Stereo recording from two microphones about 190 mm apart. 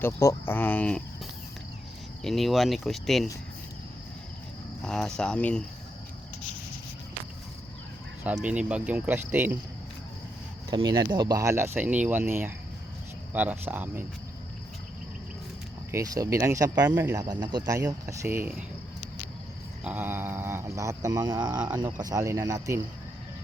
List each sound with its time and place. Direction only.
0.0 s speech: 15° left (ahead or behind)
2.2 s speech: centre (ahead or behind)
4.9 s speech: centre (ahead or behind)
8.2 s speech: 5° right (ahead or behind)
10.7 s speech: 25° right (ahead or behind)
15.9 s speech: 15° right (ahead or behind)
19.8 s speech: 10° right (ahead or behind)